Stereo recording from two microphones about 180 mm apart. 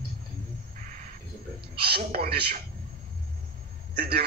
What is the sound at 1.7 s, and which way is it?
Speech, 60° right (ahead or behind).